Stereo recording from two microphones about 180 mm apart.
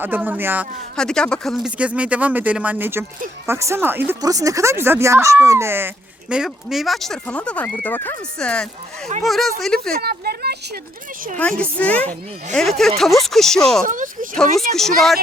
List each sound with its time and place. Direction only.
0.0 s speech: 10° right (ahead or behind)
0.9 s speech: 5° left (ahead or behind)
9.9 s speech: 60° right (ahead or behind)
11.6 s a woman's voice: 10° left (ahead or behind)
13.8 s speech: 45° right (ahead or behind)
14.5 s speech: centre (ahead or behind)